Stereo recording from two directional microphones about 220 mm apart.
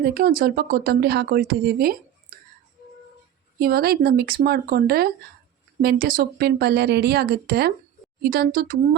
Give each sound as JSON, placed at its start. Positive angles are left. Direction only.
{"t": 0.0, "sound": "speech", "side_deg": -45}
{"t": 2.3, "sound": "whispering", "side_deg": -40}
{"t": 3.6, "sound": "speech", "side_deg": -45}